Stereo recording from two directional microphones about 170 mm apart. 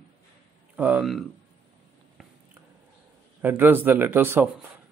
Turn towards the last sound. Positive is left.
turn(degrees=-10)  # may be behind; listen again after turning